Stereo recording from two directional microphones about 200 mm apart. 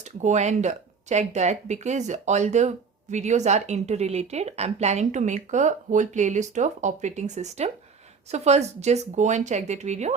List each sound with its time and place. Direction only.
0.2 s speech: 35° right (ahead or behind)